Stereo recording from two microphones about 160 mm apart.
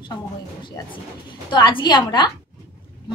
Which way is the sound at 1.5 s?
30° left (ahead or behind).